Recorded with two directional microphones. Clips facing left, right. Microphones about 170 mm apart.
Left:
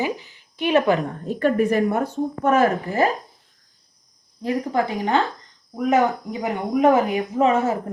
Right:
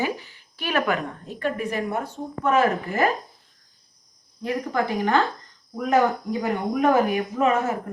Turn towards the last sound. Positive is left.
turn(degrees=25)  # may be behind; listen again after turning